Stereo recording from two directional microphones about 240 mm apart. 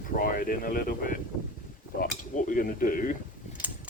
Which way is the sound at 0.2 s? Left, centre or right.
Left.